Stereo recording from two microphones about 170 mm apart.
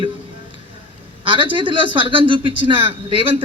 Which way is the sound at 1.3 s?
30° right (ahead or behind).